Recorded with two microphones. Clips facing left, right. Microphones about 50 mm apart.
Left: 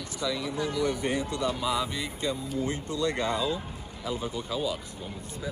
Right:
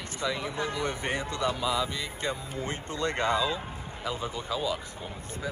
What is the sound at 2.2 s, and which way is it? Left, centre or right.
Speech, right.